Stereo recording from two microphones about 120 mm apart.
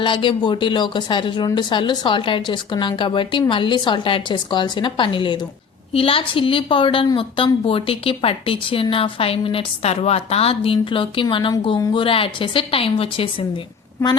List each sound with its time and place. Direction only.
0.0 s speech: 45° left (ahead or behind)